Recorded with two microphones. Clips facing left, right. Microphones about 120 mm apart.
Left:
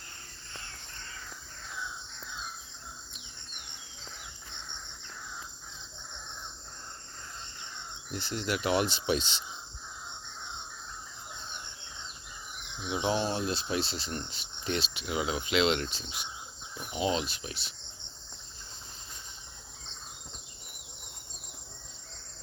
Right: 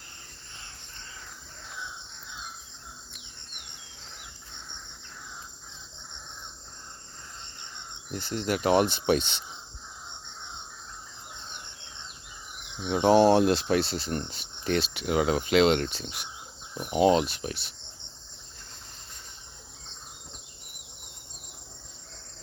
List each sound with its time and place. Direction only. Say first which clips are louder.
8.1 s speech: right 4 dB; 40° right (ahead or behind)
12.9 s speech: right 11 dB; 55° right (ahead or behind)